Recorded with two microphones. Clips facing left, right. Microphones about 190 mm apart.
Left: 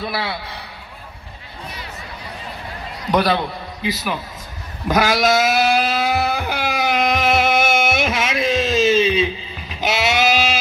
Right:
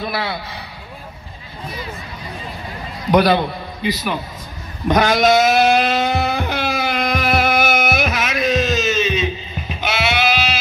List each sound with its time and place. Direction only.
0.0 s a man's voice: centre (ahead or behind)
3.1 s a man's voice: centre (ahead or behind)
4.8 s a sound: 5° left (ahead or behind); by 9.3 s 30° left (ahead or behind)
9.8 s sheep: 40° left (ahead or behind)